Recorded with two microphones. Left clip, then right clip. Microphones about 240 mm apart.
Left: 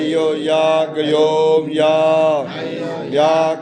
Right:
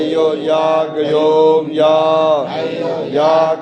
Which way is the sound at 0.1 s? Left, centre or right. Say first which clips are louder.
Right 1 dB; left.